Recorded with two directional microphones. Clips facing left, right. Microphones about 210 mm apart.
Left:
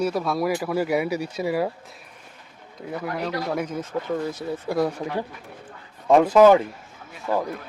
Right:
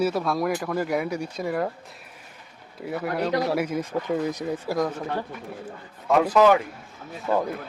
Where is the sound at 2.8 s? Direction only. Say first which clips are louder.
Right 2 dB; 5° right (ahead or behind).